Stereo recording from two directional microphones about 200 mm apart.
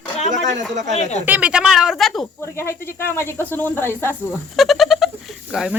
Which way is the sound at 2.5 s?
10° left (ahead or behind).